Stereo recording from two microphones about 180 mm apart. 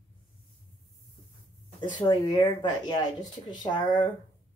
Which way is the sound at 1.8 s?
25° left (ahead or behind).